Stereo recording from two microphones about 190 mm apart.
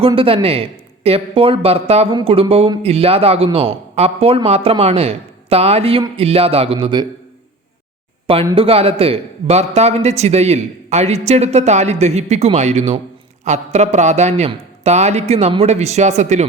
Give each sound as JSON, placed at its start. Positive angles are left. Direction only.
{"t": 0.0, "sound": "a man's voice", "side_deg": -30}
{"t": 8.5, "sound": "a man's voice", "side_deg": -30}